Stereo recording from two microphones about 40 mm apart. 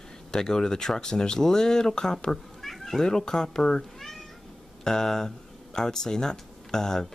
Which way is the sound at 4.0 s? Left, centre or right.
Centre.